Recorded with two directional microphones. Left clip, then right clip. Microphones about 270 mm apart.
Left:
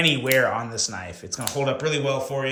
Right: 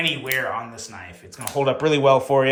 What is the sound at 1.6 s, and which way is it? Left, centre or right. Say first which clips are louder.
Speech: right 5 dB; centre.